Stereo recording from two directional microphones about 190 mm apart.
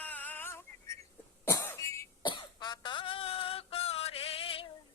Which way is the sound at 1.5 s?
15° left (ahead or behind).